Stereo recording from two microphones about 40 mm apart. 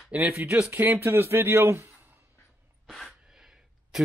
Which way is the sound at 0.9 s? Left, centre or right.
Right.